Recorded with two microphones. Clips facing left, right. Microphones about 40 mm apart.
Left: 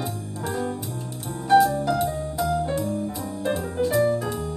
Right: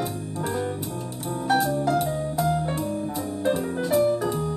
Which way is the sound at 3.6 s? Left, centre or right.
Right.